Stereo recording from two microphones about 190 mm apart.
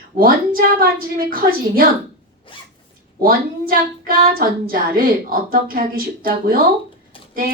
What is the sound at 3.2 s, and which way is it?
Female singing, 50° right (ahead or behind).